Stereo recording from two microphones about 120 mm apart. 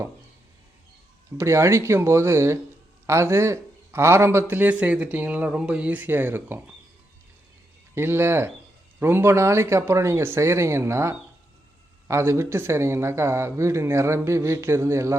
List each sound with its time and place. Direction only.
1.4 s a man's voice: 25° right (ahead or behind)
7.9 s a man's voice: 20° right (ahead or behind)